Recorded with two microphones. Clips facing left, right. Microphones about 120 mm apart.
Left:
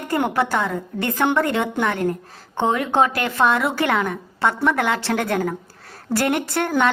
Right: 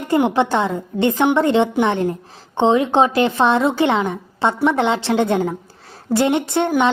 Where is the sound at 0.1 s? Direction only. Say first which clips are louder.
Right 4 dB; 20° right (ahead or behind).